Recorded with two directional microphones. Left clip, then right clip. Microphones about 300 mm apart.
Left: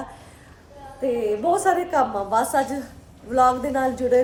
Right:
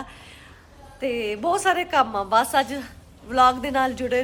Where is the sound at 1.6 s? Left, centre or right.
Centre.